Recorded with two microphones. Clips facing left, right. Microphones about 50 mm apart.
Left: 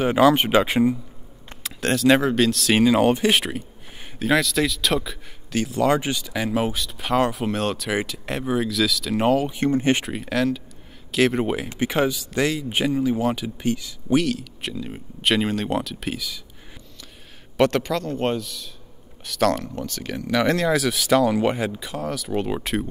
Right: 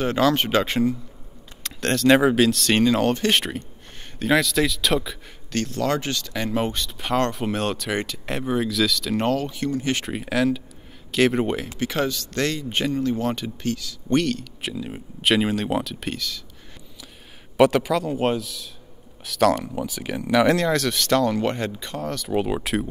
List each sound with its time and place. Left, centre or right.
0.0 s speech: centre
9.6 s speech: left
10.0 s speech: centre
11.8 s speech: centre
13.7 s speech: centre
14.0 s speech: centre
17.6 s speech: centre